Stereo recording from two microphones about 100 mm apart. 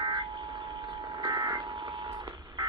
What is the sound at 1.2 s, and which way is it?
Vehicle, 40° right (ahead or behind).